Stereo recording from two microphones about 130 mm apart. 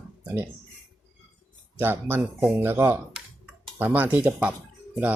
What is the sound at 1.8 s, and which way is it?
Speech, 15° right (ahead or behind).